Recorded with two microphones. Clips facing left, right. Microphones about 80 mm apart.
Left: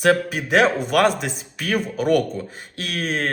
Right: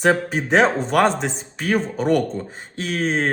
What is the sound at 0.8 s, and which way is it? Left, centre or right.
A man's voice, centre.